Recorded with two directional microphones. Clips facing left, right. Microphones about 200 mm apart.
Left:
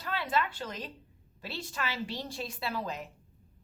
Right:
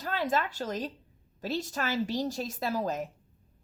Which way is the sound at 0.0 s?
45° right (ahead or behind).